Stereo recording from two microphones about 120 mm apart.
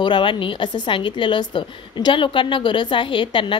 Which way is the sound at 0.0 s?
45° left (ahead or behind).